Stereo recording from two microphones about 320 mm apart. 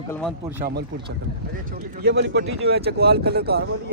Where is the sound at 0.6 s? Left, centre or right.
Right.